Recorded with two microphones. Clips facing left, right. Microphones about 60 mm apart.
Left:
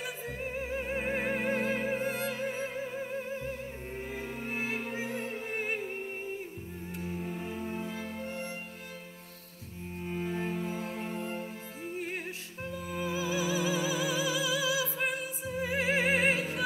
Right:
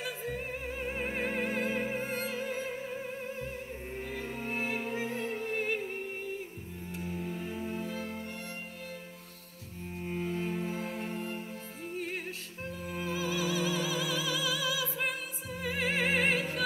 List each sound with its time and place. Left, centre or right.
0.0 s music: centre
4.0 s music: centre
6.9 s music: centre
10.0 s music: centre
10.3 s music: centre
12.9 s music: centre